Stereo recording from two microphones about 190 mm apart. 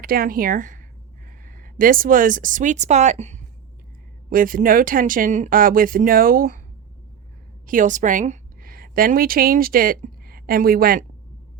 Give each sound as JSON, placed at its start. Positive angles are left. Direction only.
{"t": 0.0, "sound": "speech", "side_deg": -50}
{"t": 4.3, "sound": "speech", "side_deg": -45}
{"t": 7.7, "sound": "a woman's voice", "side_deg": -40}